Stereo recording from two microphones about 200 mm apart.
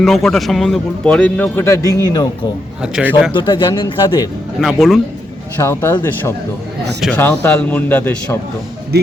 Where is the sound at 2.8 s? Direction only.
5° right (ahead or behind).